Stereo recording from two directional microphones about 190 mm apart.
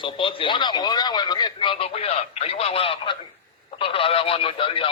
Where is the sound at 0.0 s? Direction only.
25° left (ahead or behind).